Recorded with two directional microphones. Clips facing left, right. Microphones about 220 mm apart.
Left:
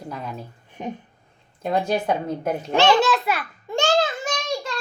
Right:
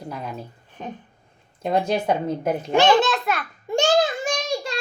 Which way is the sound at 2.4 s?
15° right (ahead or behind).